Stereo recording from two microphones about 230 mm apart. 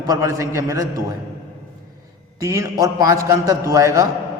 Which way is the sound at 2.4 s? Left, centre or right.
Centre.